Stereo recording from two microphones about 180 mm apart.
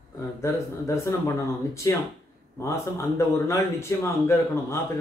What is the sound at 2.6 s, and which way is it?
A man's voice, 15° left (ahead or behind).